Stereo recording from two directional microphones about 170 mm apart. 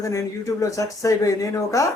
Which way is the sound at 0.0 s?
20° left (ahead or behind).